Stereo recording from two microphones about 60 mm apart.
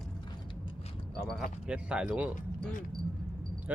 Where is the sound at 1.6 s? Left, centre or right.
Centre.